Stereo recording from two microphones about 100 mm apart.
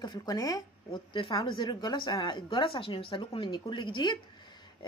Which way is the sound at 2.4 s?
60° left (ahead or behind).